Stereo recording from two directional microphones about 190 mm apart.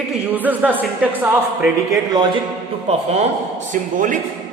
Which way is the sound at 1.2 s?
5° right (ahead or behind).